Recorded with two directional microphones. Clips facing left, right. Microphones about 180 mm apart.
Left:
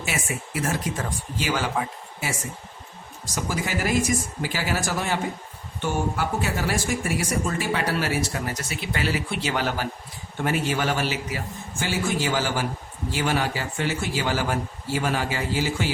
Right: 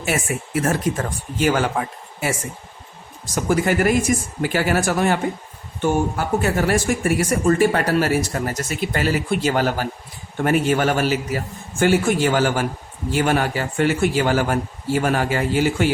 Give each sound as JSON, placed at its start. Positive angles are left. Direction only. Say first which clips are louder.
{"t": 0.0, "sound": "speech", "louder": "right 6 dB", "side_deg": -55}
{"t": 3.3, "sound": "a man's voice", "louder": "right 9 dB", "side_deg": -55}